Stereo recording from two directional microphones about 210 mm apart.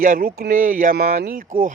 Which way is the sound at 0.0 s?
40° right (ahead or behind).